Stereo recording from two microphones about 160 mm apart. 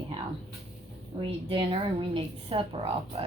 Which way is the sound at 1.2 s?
35° right (ahead or behind).